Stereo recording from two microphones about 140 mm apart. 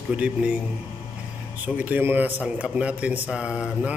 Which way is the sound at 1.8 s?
15° right (ahead or behind).